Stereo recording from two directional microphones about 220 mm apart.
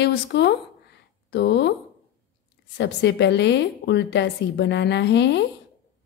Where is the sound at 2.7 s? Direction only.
50° left (ahead or behind).